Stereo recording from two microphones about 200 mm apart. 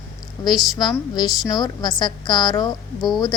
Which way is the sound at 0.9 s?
20° left (ahead or behind).